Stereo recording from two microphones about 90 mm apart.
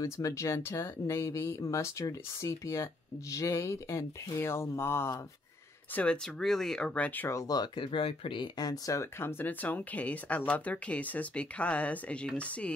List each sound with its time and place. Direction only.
0.0 s speech: 35° left (ahead or behind)
6.4 s speech: 5° left (ahead or behind)
6.9 s speech: 15° left (ahead or behind)
7.2 s speech: 35° left (ahead or behind)
7.5 s speech: 55° left (ahead or behind)
9.2 s speech: 20° left (ahead or behind)